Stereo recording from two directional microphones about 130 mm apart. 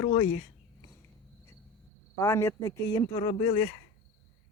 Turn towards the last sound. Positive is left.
turn(degrees=45)  # may be behind; listen again after turning